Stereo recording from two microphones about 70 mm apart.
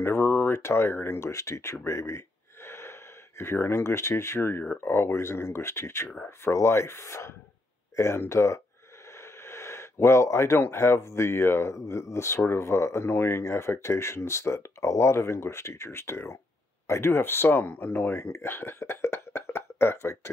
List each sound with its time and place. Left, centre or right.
0.0 s speech: left